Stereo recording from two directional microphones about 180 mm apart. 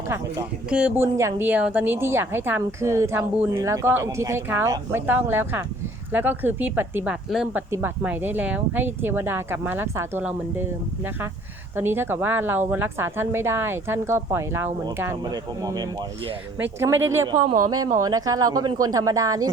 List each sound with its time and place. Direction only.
0.7 s a woman's voice: 5° right (ahead or behind)
11.8 s a woman's voice: 10° right (ahead or behind)